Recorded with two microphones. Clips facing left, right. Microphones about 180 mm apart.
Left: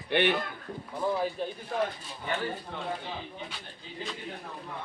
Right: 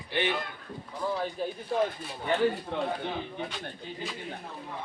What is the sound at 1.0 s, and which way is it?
Speech, 20° left (ahead or behind).